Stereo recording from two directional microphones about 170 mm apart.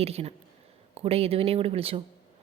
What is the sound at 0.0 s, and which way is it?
Speech, 35° right (ahead or behind).